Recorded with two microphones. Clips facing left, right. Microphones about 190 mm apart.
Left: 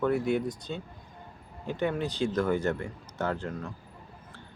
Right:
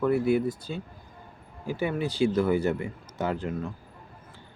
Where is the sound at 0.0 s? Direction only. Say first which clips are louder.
Right 3 dB; 5° right (ahead or behind).